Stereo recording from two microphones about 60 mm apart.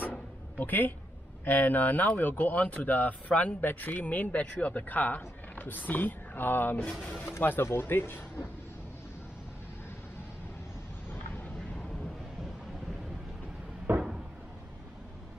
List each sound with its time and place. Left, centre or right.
0.6 s speech: left
6.9 s speech: centre
7.3 s speech: left
13.9 s cupboard open or close: right